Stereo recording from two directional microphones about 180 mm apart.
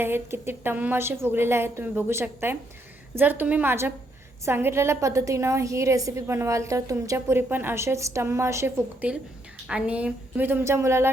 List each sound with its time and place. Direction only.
0.0 s a woman's voice: 10° right (ahead or behind)